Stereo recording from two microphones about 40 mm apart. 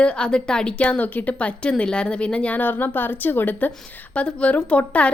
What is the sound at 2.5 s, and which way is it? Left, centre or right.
Speech, left.